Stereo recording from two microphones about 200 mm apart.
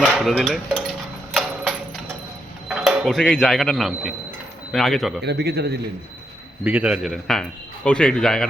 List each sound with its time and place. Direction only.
0.0 s speech: centre (ahead or behind)
1.3 s a sound: centre (ahead or behind)
2.6 s a man's voice: 5° right (ahead or behind)
5.2 s a man's voice: 55° right (ahead or behind)
6.7 s a man's voice: 5° right (ahead or behind)